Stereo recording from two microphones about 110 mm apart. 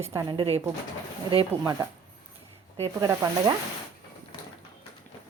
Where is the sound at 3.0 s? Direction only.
35° right (ahead or behind).